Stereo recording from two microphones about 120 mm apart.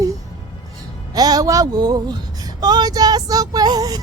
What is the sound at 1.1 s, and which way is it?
Speech, 35° right (ahead or behind).